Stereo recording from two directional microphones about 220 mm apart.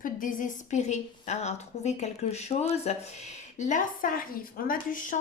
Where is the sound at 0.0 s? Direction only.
35° left (ahead or behind).